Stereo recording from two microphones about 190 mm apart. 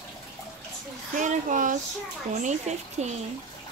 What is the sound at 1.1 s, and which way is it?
Speech, 40° right (ahead or behind).